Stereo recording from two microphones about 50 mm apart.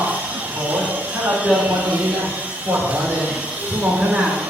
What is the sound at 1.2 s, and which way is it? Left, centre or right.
Speech, right.